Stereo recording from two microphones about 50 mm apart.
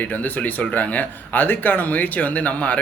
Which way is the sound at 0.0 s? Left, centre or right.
Left.